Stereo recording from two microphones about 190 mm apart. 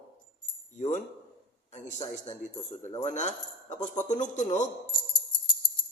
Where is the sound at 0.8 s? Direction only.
40° left (ahead or behind).